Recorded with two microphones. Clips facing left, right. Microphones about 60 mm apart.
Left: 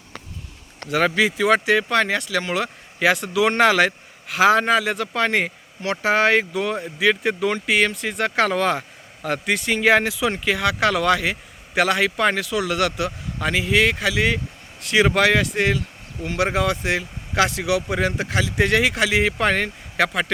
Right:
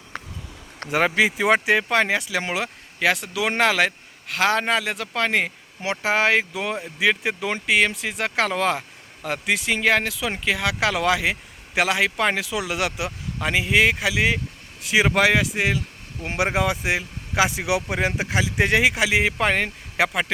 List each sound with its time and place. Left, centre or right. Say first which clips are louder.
0.9 s speech: left 1 dB; centre
3.0 s speech: left 4 dB; centre